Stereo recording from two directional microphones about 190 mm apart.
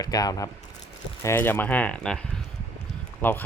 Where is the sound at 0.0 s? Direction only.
20° left (ahead or behind).